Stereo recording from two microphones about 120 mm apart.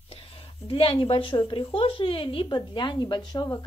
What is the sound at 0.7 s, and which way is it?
A woman's voice, 50° left (ahead or behind).